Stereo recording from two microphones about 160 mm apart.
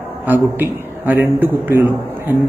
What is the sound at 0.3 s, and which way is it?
A man's voice, 10° right (ahead or behind).